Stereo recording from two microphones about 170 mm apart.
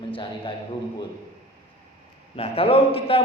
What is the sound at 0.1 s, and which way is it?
Speech, 30° left (ahead or behind).